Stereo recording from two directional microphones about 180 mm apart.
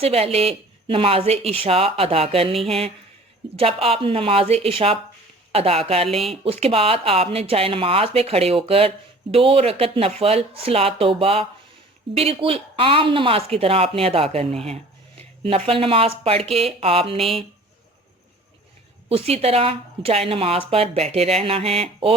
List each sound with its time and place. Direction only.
0.0 s speech: 35° right (ahead or behind)
19.0 s speech: 35° right (ahead or behind)